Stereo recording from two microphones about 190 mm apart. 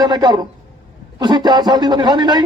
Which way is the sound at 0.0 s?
20° right (ahead or behind).